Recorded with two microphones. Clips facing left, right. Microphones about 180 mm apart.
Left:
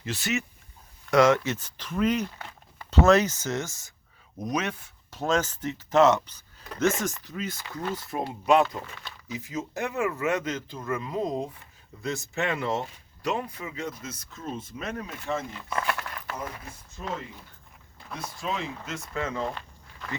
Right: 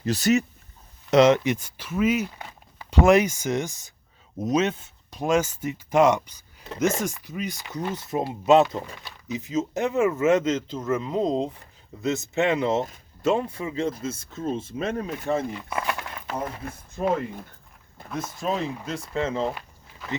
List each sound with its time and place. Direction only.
0.0 s speech: 40° right (ahead or behind)
1.1 s speech: 20° right (ahead or behind)
5.2 s speech: 10° right (ahead or behind); by 15.3 s 30° right (ahead or behind)
15.7 s a sound: 15° right (ahead or behind)
16.6 s speech: 55° right (ahead or behind)
18.3 s speech: 40° right (ahead or behind)
20.0 s speech: centre (ahead or behind)